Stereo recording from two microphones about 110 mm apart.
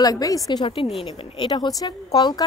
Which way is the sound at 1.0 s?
50° left (ahead or behind).